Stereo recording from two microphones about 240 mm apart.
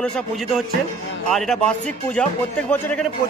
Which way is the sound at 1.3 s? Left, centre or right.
Centre.